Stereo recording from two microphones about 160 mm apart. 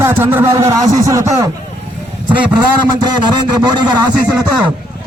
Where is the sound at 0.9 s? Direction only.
20° right (ahead or behind).